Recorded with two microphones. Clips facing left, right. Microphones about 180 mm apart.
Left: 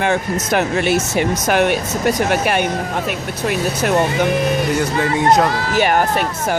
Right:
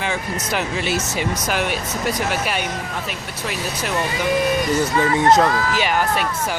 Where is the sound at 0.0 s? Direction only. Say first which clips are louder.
Left 7 dB; 55° left (ahead or behind).